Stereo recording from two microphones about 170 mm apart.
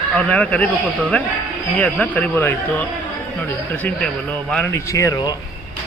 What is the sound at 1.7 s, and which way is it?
Speech, 5° left (ahead or behind).